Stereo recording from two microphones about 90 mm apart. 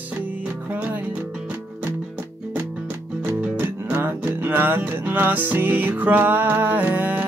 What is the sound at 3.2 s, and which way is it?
Music, 20° right (ahead or behind).